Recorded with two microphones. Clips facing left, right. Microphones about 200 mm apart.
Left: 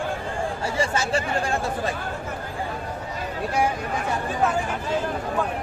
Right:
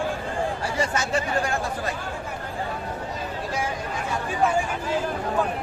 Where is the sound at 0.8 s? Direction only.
30° left (ahead or behind).